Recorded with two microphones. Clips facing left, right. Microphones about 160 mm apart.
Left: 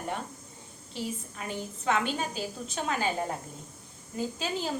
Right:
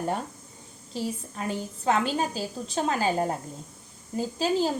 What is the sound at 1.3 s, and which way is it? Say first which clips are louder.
A woman's voice: right 5 dB; 35° right (ahead or behind).